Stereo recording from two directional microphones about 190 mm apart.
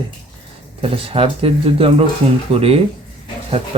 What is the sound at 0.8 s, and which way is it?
Speech, 30° right (ahead or behind).